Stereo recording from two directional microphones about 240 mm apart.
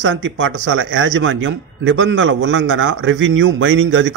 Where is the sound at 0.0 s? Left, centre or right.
Right.